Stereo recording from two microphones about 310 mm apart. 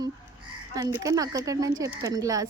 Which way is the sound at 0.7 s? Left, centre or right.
Centre.